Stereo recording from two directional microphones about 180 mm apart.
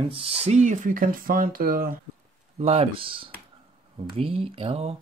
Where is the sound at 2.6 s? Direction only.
35° right (ahead or behind).